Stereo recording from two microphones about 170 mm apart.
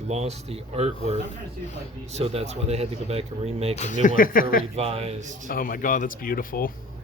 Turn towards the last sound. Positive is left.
turn(degrees=55)  # may be behind; listen again after turning